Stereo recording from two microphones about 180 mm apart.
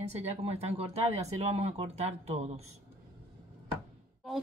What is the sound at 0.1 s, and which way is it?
Speech, 35° right (ahead or behind).